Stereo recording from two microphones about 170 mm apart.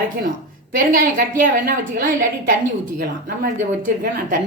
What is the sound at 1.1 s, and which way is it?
Speech, 55° right (ahead or behind).